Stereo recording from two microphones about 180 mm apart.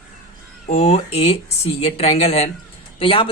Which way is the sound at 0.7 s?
35° left (ahead or behind).